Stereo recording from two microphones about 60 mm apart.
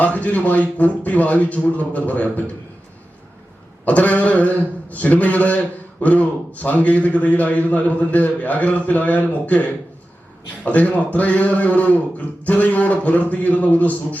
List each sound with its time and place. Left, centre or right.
0.0 s a man's voice: left
3.8 s a man's voice: left